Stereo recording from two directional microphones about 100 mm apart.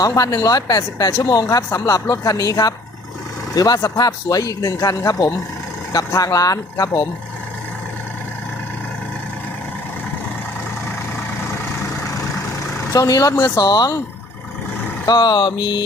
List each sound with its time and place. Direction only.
0.0 s speech: 35° left (ahead or behind)
12.9 s speech: 35° left (ahead or behind)
15.0 s speech: 45° left (ahead or behind)